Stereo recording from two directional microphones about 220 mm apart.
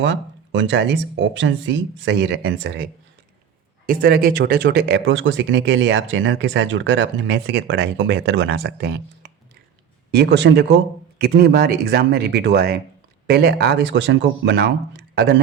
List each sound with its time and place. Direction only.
0.0 s speech: 55° right (ahead or behind)
3.8 s speech: 45° right (ahead or behind)